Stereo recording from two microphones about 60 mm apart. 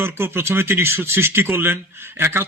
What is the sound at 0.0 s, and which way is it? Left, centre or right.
A man's voice, right.